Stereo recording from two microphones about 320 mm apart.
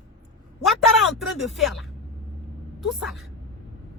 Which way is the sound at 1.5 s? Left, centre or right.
Centre.